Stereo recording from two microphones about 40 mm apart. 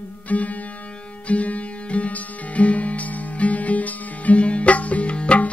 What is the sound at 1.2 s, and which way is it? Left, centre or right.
Music, left.